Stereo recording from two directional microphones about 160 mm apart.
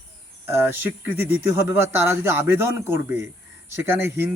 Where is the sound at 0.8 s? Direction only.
15° right (ahead or behind).